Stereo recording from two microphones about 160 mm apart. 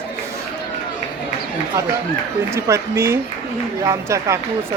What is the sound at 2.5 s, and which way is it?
Speech, 15° right (ahead or behind).